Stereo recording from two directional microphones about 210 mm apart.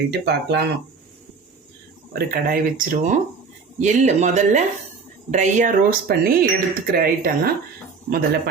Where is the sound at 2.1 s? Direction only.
45° right (ahead or behind).